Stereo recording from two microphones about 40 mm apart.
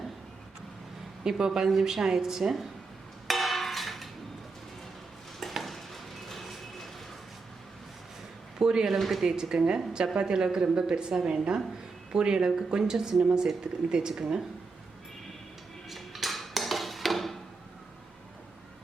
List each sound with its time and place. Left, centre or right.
1.2 s a woman's voice: centre
3.2 s music: centre
5.4 s stir: centre
8.5 s a sound: centre
8.9 s speech: centre
9.2 s a woman's voice: centre
15.9 s dishes: centre